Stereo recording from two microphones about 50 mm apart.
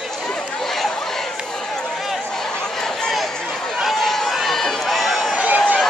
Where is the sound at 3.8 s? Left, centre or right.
Centre.